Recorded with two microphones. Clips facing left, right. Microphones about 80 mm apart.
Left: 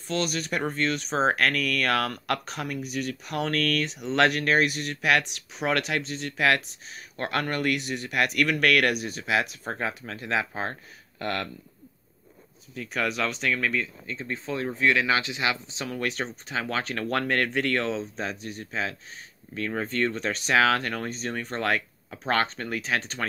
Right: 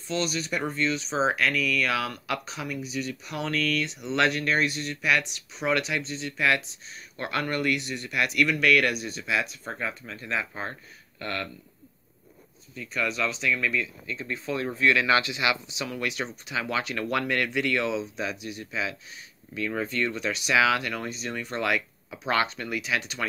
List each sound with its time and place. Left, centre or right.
0.1 s speech: left
10.7 s speech: left
12.9 s speech: left